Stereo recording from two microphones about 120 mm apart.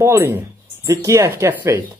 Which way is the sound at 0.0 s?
20° right (ahead or behind).